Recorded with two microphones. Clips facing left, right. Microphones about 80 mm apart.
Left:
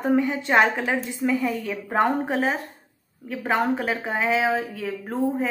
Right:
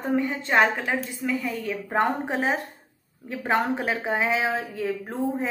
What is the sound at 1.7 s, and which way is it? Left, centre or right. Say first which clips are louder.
A woman's voice: left 1 dB; centre.